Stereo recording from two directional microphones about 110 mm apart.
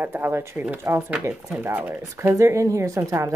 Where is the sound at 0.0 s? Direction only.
20° right (ahead or behind).